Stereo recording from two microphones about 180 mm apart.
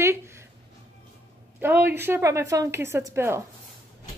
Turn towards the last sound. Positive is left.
turn(degrees=-15)  # may be behind; listen again after turning